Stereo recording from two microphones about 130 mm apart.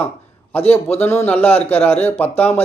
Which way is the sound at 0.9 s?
15° left (ahead or behind).